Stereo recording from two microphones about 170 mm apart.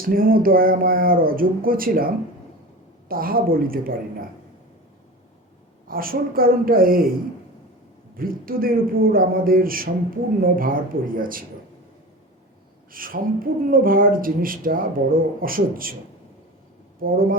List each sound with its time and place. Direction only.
0.1 s speech: 55° right (ahead or behind)
5.9 s speech: 60° right (ahead or behind)
12.9 s speech: 55° right (ahead or behind)
17.0 s speech: 60° right (ahead or behind)